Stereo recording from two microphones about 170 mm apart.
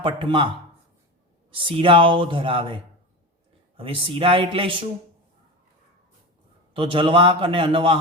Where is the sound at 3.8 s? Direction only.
30° right (ahead or behind).